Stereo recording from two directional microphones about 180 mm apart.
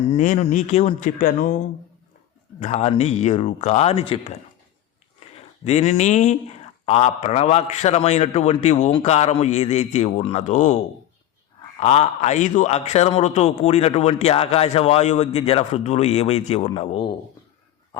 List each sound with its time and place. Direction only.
0.1 s a man's voice: 40° left (ahead or behind)
5.6 s a man's voice: 40° left (ahead or behind)
11.8 s a man's voice: 35° left (ahead or behind)